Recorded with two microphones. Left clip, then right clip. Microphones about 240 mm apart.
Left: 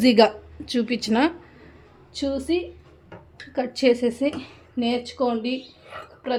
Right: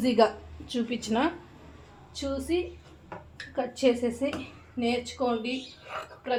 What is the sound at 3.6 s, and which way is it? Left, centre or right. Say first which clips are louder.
A woman's voice: left 5 dB; left.